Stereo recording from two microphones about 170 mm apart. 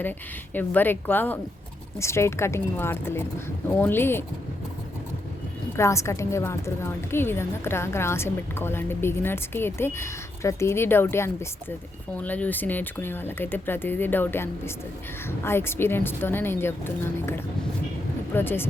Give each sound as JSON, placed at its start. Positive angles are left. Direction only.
{"t": 0.0, "sound": "a woman's voice", "side_deg": 10}
{"t": 5.7, "sound": "a woman's voice", "side_deg": 15}